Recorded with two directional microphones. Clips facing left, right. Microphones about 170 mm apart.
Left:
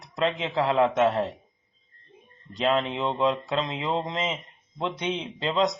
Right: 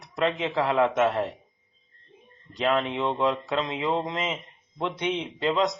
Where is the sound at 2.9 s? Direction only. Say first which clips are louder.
Even; 20° left (ahead or behind).